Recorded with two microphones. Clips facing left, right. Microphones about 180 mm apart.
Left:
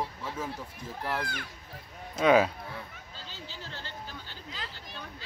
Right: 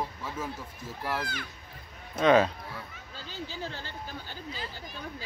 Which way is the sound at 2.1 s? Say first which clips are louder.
Right 1 dB; 10° left (ahead or behind).